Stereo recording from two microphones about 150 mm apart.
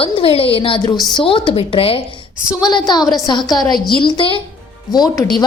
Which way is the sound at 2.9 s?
25° left (ahead or behind).